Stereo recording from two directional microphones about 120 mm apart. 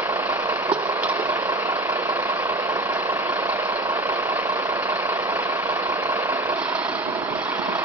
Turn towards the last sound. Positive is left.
turn(degrees=-15)  # may be behind; listen again after turning